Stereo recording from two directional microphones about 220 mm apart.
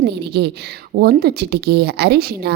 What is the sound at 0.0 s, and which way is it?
A woman's voice, 50° right (ahead or behind).